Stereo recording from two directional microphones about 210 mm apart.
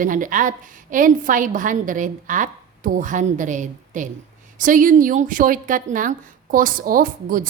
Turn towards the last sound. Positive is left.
turn(degrees=-40)  # may be behind; listen again after turning